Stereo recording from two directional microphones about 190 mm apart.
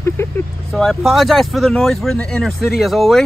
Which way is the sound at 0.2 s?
15° left (ahead or behind).